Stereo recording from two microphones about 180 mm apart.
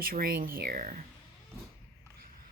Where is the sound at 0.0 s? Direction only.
55° right (ahead or behind).